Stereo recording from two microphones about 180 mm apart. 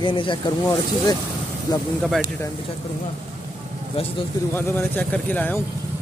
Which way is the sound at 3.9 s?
30° left (ahead or behind).